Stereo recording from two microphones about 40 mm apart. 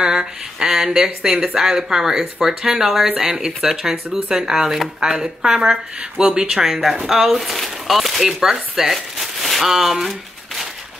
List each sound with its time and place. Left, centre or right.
0.0 s speech: centre
6.6 s speech: centre
10.0 s a sound: centre